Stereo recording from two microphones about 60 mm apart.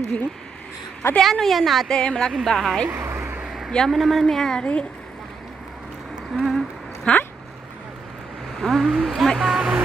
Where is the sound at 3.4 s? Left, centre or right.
Centre.